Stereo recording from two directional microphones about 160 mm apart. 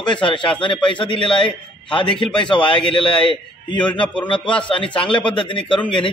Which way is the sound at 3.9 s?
10° left (ahead or behind).